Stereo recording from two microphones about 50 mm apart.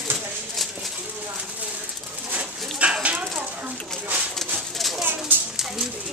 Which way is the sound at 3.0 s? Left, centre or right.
Right.